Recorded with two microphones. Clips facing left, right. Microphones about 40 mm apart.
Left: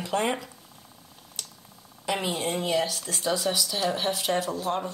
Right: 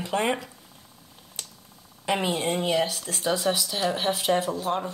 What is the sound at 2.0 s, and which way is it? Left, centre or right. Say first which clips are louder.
Speech: right 3 dB; centre.